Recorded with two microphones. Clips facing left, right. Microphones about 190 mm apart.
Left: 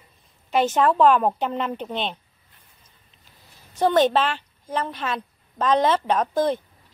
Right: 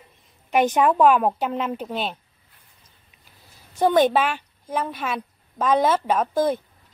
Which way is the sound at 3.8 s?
10° right (ahead or behind).